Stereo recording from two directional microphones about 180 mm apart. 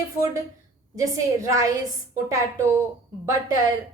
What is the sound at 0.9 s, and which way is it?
Speech, 20° right (ahead or behind).